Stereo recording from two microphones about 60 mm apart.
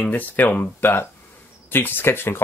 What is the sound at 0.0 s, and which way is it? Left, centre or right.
Speech, left.